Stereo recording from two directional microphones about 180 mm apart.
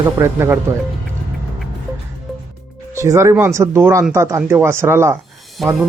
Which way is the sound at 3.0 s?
15° right (ahead or behind).